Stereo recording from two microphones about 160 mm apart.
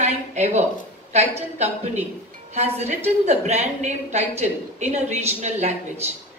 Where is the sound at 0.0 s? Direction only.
45° right (ahead or behind).